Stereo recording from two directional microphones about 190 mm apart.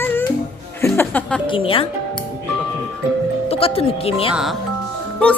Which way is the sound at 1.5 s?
30° left (ahead or behind).